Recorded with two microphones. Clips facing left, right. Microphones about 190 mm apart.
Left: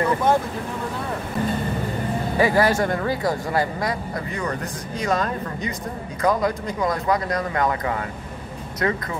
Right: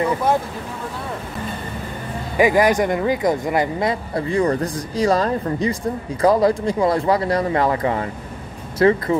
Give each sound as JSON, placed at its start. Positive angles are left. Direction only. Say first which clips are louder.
{"t": 2.3, "sound": "speech", "louder": "right 4 dB", "side_deg": -15}
{"t": 4.1, "sound": "speech", "louder": "right 8 dB", "side_deg": -30}